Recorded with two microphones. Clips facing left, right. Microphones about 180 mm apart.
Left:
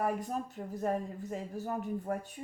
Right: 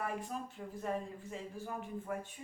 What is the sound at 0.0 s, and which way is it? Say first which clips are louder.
Speech: left 6 dB; 40° left (ahead or behind).